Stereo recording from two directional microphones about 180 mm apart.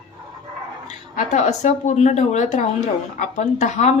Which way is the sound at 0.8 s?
40° left (ahead or behind).